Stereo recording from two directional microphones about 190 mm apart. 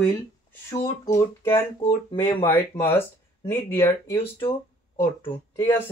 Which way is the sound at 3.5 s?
10° left (ahead or behind).